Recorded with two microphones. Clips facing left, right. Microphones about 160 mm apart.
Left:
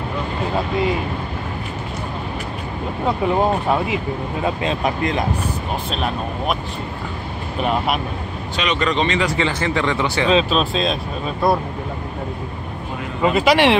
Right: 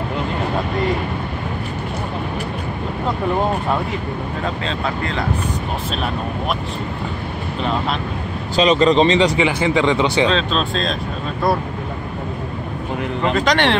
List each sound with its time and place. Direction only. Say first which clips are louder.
4.4 s speech: left 4 dB; 15° left (ahead or behind)
7.6 s speech: left 2 dB; 10° left (ahead or behind)
8.5 s speech: right 7 dB; 30° right (ahead or behind)
9.4 s speech: right 4 dB; 15° right (ahead or behind)
10.2 s speech: left 2 dB; 10° left (ahead or behind)
13.2 s speech: left 3 dB; 10° left (ahead or behind)